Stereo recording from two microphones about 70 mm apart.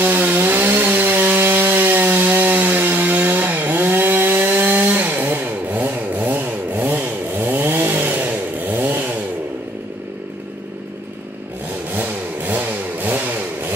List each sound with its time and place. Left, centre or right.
0.0 s wood: right
11.9 s vehicle: right